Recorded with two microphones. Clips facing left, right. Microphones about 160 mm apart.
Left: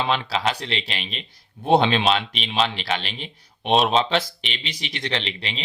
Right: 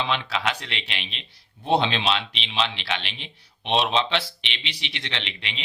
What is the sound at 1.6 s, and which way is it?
A man's voice, 50° left (ahead or behind).